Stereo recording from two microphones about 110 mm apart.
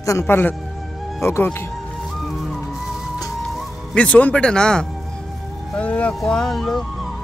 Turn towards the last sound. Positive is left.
turn(degrees=0)  # may be behind; listen again after turning